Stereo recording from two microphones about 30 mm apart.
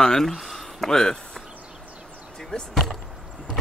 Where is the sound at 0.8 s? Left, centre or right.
Centre.